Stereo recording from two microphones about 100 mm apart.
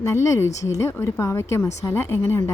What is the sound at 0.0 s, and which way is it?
A woman's voice, 30° left (ahead or behind).